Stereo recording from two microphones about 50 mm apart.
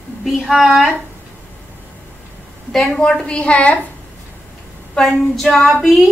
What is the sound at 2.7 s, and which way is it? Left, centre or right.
Speech, centre.